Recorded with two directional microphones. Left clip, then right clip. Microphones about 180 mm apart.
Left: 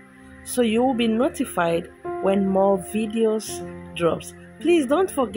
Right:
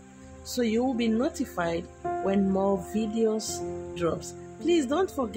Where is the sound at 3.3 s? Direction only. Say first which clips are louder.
Left 4 dB; centre (ahead or behind).